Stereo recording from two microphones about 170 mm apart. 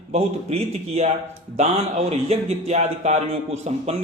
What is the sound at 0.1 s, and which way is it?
A man's voice, 40° right (ahead or behind).